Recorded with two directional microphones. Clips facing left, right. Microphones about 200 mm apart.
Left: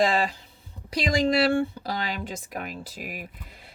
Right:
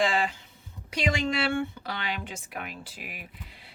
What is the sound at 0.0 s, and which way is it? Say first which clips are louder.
A woman's voice: left 3 dB; 40° left (ahead or behind).